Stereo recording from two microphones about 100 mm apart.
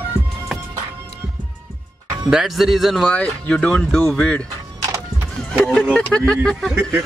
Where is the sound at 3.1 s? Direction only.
10° left (ahead or behind).